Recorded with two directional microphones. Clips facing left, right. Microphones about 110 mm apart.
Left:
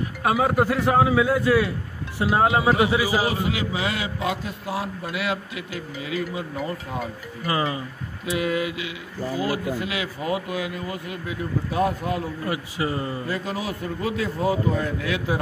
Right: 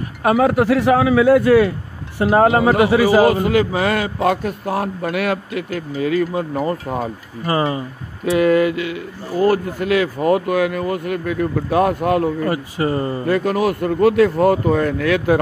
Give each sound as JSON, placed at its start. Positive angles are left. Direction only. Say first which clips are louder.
{"t": 0.2, "sound": "a man's voice", "louder": "right 6 dB", "side_deg": -60}
{"t": 8.3, "sound": "a man's voice", "louder": "right 10 dB", "side_deg": -50}
{"t": 12.4, "sound": "speech", "louder": "right 7 dB", "side_deg": -50}